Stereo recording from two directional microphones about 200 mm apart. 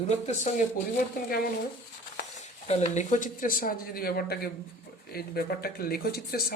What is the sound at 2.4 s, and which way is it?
Speech, 35° left (ahead or behind).